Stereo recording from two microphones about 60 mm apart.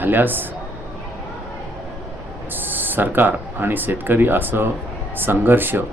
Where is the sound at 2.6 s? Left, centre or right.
Right.